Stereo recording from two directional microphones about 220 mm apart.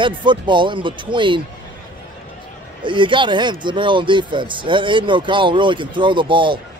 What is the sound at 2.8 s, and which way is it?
A man's voice, 20° right (ahead or behind).